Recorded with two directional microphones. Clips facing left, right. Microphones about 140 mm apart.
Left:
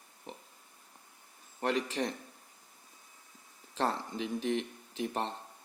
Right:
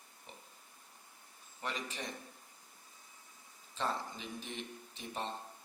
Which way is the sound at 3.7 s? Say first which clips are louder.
Left 5 dB; 75° left (ahead or behind).